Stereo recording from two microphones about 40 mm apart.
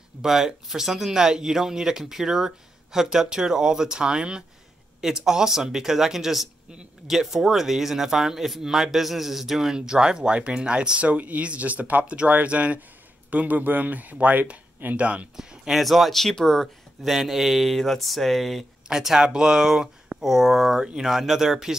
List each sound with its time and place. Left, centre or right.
0.2 s speech: centre
11.0 s speech: right
15.0 s speech: right
15.3 s speech: centre
15.7 s speech: centre
18.9 s speech: centre